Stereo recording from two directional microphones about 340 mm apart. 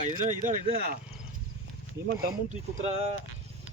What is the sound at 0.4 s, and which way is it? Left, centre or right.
Speech, right.